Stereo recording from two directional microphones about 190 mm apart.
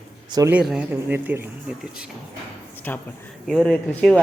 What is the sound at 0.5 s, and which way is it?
Speech, 5° right (ahead or behind).